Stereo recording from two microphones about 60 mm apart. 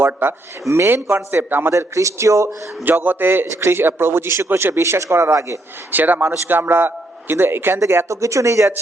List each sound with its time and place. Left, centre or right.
0.0 s a man's voice: right
1.1 s a man's voice: right
1.7 s speech: right
3.0 s a man's voice: right
4.8 s speech: right
5.9 s a man's voice: right
7.8 s speech: right